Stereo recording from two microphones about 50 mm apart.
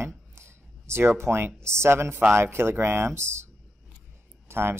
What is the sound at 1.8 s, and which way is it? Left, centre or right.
Speech, right.